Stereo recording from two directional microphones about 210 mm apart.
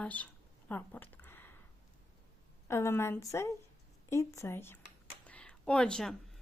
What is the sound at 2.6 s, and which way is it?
A woman's voice, 10° left (ahead or behind).